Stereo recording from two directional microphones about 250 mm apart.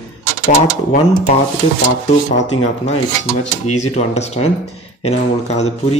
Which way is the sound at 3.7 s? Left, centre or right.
Left.